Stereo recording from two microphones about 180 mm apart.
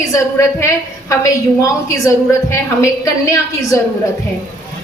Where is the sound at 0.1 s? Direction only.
15° left (ahead or behind).